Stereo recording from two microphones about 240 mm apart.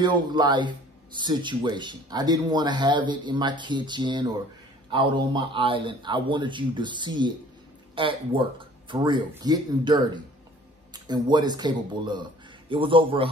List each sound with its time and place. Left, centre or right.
0.0 s speech: centre